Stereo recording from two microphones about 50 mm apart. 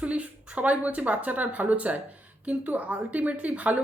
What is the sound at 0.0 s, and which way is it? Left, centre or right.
A woman's voice, right.